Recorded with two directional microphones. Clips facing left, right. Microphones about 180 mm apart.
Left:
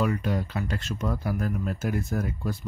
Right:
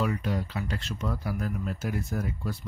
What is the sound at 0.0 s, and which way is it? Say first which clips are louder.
Speech: left 3 dB; 50° left (ahead or behind).